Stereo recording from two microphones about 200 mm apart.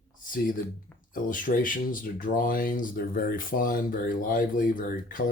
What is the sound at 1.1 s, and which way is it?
Speech, 40° left (ahead or behind).